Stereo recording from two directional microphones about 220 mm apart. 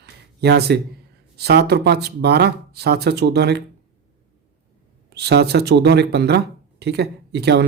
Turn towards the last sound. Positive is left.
turn(degrees=-50)  # may be behind; listen again after turning